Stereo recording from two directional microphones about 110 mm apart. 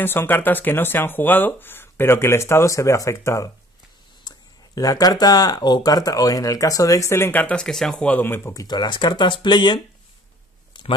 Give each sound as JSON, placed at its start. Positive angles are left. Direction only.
{"t": 0.0, "sound": "speech", "side_deg": 20}
{"t": 8.5, "sound": "speech", "side_deg": 40}
{"t": 10.7, "sound": "a sound", "side_deg": 45}